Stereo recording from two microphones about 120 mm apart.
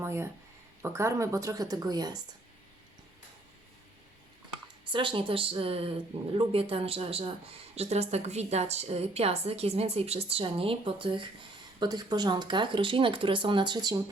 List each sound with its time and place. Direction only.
0.0 s a sound: 20° right (ahead or behind)
0.8 s speech: 25° right (ahead or behind)
4.9 s a woman's voice: 45° right (ahead or behind)
11.8 s speech: 35° right (ahead or behind)